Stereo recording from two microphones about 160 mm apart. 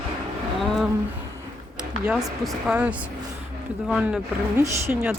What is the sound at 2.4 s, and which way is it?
Speech, 5° right (ahead or behind).